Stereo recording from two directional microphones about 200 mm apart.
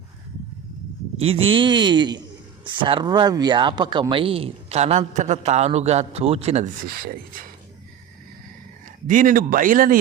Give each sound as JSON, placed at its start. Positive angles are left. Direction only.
{"t": 1.2, "sound": "speech", "side_deg": -30}
{"t": 6.8, "sound": "speech", "side_deg": -50}
{"t": 9.0, "sound": "speech", "side_deg": -40}